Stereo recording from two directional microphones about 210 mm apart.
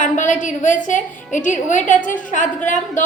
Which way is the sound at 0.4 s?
35° left (ahead or behind).